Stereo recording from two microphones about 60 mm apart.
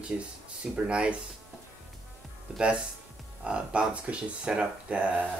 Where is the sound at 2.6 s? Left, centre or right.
Centre.